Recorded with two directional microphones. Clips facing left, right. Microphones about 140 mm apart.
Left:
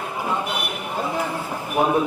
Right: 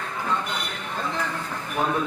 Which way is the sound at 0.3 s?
10° left (ahead or behind).